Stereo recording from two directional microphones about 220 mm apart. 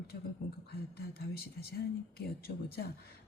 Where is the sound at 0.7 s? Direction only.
45° left (ahead or behind).